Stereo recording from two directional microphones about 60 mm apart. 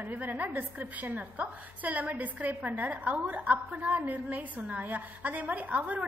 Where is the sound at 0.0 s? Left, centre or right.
Right.